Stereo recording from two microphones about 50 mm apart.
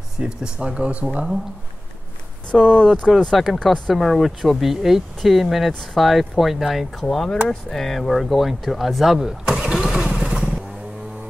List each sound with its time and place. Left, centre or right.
0.2 s speech: centre
2.5 s speech: centre
3.3 s speech: centre
3.6 s speech: centre
3.9 s speech: centre
9.6 s vehicle: centre